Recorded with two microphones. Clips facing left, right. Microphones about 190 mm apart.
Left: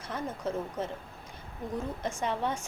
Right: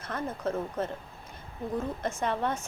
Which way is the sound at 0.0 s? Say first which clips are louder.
Right 2 dB; 10° left (ahead or behind).